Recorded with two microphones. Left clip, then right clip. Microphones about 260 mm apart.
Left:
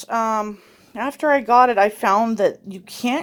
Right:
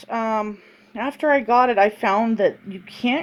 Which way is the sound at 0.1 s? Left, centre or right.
Left.